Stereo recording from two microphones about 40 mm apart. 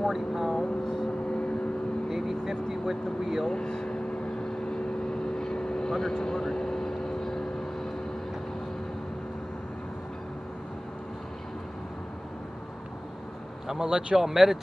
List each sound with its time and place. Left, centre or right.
0.1 s speech: centre
2.1 s vehicle: centre
2.9 s speech: centre
3.4 s vehicle: left
13.7 s a man's voice: centre
14.2 s speech: centre